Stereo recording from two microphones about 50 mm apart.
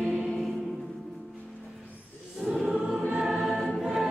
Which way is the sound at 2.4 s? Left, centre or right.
Centre.